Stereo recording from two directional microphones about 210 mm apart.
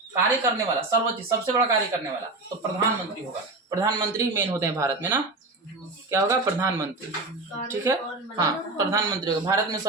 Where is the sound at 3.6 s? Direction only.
20° right (ahead or behind).